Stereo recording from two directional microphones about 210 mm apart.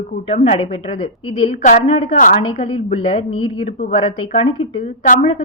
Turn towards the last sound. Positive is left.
turn(degrees=30)  # may be behind; listen again after turning